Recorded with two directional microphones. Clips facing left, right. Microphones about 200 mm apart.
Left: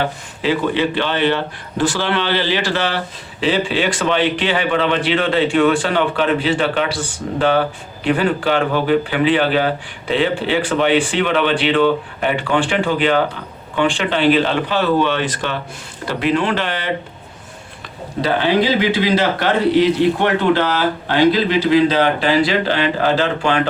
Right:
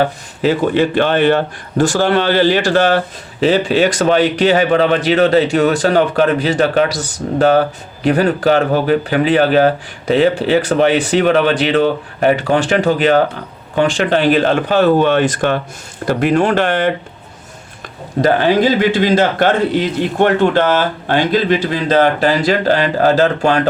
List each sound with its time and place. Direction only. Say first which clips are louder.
0.0 s a man's voice: right 5 dB; 45° right (ahead or behind)
18.2 s speech: right 4 dB; 45° right (ahead or behind)